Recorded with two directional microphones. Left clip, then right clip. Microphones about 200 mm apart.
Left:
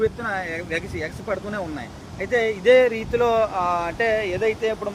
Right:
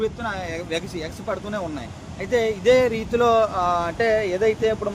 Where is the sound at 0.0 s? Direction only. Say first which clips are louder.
Left 2 dB; 55° right (ahead or behind).